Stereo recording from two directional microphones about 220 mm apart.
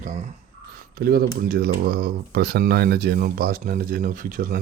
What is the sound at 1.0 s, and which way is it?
Speech, 45° right (ahead or behind).